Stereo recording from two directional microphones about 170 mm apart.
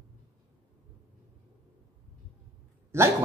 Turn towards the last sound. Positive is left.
turn(degrees=-15)  # may be behind; listen again after turning